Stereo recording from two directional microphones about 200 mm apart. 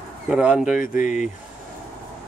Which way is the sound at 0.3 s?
5° right (ahead or behind).